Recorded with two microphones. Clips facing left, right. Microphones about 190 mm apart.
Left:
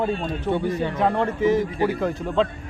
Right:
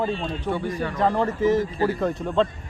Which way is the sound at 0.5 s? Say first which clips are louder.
Left 4 dB; 20° left (ahead or behind).